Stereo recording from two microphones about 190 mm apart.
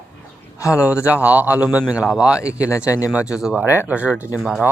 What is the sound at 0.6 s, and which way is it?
Speech, 15° left (ahead or behind).